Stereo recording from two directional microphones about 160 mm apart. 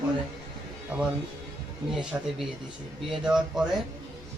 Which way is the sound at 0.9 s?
5° right (ahead or behind).